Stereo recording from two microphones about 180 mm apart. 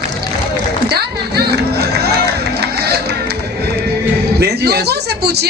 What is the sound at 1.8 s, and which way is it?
Music, 60° right (ahead or behind).